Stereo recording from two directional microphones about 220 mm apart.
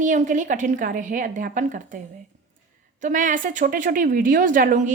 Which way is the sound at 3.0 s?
35° right (ahead or behind).